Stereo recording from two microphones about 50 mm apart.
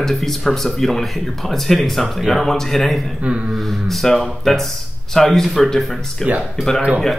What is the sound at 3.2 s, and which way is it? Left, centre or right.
Speech, right.